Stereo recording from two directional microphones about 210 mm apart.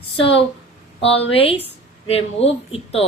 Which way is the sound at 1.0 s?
30° left (ahead or behind).